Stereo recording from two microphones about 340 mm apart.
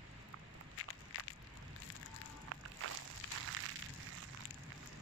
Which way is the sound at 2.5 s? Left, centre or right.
Right.